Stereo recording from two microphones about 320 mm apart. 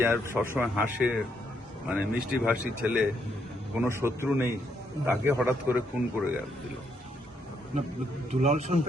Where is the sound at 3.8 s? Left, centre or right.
Centre.